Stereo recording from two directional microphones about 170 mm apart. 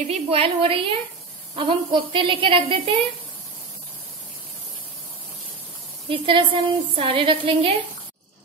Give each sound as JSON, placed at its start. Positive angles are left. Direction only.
{"t": 0.0, "sound": "a woman's voice", "side_deg": -40}
{"t": 6.0, "sound": "a woman's voice", "side_deg": -30}